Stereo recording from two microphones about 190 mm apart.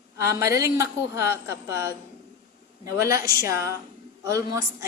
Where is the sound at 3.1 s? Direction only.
15° right (ahead or behind).